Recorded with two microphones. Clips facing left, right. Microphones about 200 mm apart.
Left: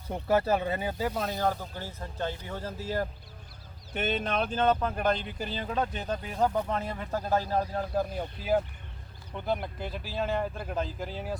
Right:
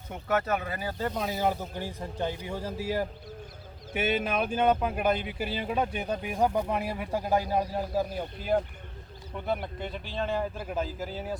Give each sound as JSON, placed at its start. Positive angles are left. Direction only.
{"t": 0.1, "sound": "speech", "side_deg": 30}
{"t": 0.9, "sound": "speech", "side_deg": 5}
{"t": 1.2, "sound": "speech", "side_deg": -5}